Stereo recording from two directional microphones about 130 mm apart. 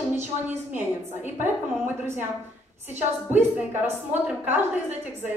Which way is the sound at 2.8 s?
15° right (ahead or behind).